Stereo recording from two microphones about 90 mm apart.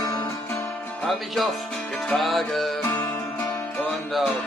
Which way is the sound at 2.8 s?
45° left (ahead or behind).